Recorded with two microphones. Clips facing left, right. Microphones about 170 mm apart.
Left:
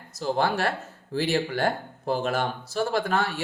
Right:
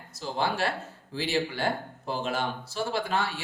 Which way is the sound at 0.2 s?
50° left (ahead or behind).